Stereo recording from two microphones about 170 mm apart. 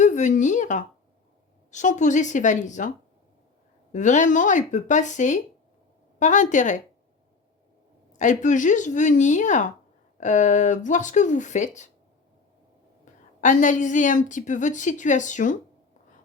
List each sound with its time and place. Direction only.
0.0 s a woman's voice: 45° left (ahead or behind)
3.9 s a woman's voice: 45° left (ahead or behind)
8.2 s a woman's voice: 45° left (ahead or behind)
13.1 s a sound: 45° left (ahead or behind)
13.4 s a woman's voice: 50° left (ahead or behind)